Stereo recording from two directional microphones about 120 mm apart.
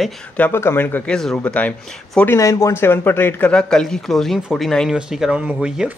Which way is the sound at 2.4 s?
25° left (ahead or behind).